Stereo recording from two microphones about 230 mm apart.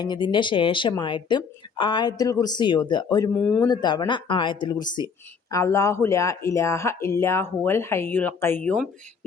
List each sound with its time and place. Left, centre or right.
0.0 s speech: centre
3.3 s speech: centre
3.7 s speech: centre